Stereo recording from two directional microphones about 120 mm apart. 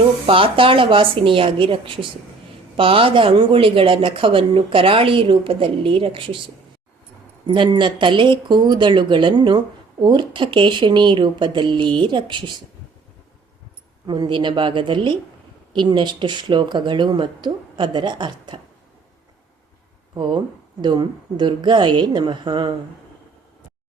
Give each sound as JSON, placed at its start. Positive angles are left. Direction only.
{"t": 0.3, "sound": "speech", "side_deg": -45}
{"t": 7.4, "sound": "speech", "side_deg": -40}
{"t": 14.1, "sound": "speech", "side_deg": -40}
{"t": 20.1, "sound": "speech", "side_deg": -40}